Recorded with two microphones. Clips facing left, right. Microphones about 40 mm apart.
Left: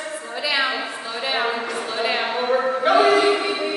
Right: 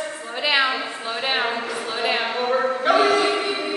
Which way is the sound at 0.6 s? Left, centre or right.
Centre.